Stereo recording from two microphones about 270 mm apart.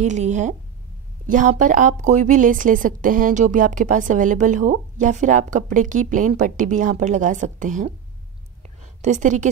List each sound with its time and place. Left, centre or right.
0.0 s a woman's voice: right